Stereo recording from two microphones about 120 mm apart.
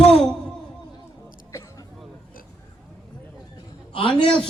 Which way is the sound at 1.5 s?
25° left (ahead or behind).